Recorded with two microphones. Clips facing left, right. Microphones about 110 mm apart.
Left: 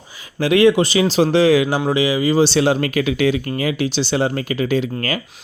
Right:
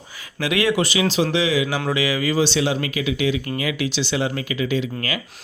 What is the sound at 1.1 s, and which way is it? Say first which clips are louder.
Speech: left 6 dB; 40° left (ahead or behind).